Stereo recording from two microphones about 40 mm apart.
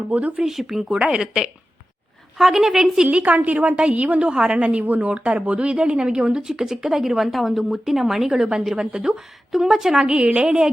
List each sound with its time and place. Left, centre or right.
0.4 s speech: centre
1.0 s speech: centre
3.1 s a woman's voice: right
4.4 s speech: centre
4.6 s a woman's voice: right; by 10.2 s centre
10.2 s speech: right